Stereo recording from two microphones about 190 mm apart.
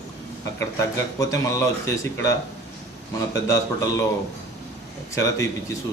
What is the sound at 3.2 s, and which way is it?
Speech, 15° left (ahead or behind).